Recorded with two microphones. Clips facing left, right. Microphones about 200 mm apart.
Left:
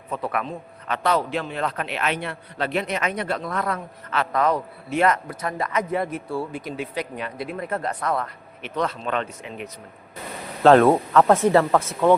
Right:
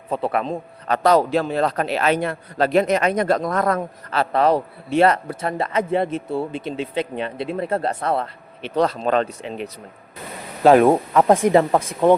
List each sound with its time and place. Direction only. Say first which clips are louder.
0.1 s a man's voice: right 5 dB; 30° right (ahead or behind)
10.6 s speech: right 1 dB; 10° right (ahead or behind)